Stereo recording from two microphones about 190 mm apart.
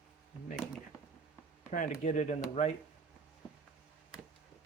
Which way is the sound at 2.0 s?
40° left (ahead or behind).